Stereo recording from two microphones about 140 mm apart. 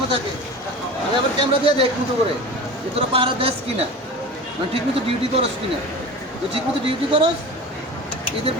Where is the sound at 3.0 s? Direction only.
40° right (ahead or behind).